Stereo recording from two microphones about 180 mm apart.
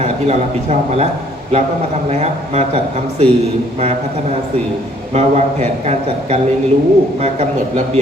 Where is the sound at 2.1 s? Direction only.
35° right (ahead or behind).